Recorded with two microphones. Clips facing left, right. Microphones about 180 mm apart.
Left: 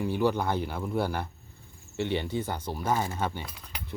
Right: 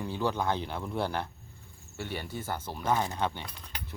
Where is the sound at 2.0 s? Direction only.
20° left (ahead or behind); by 3.6 s 5° left (ahead or behind).